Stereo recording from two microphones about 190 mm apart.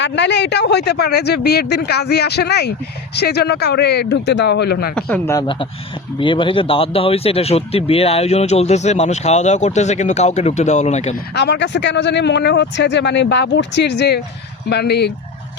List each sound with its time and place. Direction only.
0.0 s speech: 65° left (ahead or behind)
4.9 s speech: 5° left (ahead or behind); by 11.1 s 35° left (ahead or behind)
11.3 s speech: 65° left (ahead or behind)